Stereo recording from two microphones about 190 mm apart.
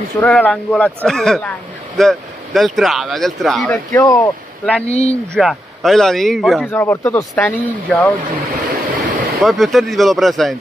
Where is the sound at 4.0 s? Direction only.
20° left (ahead or behind).